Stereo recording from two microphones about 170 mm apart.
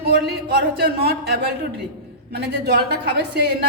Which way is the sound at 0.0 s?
70° right (ahead or behind).